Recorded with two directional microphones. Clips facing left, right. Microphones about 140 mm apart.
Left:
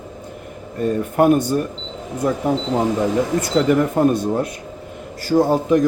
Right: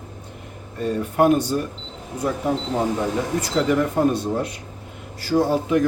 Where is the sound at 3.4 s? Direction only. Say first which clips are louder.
Left 3 dB; 50° left (ahead or behind).